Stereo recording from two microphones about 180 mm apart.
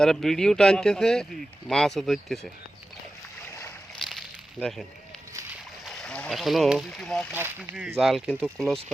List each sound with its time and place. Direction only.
0.0 s speech: 5° left (ahead or behind)
5.8 s speech: centre (ahead or behind)
7.3 s speech: 10° right (ahead or behind)
7.9 s speech: centre (ahead or behind)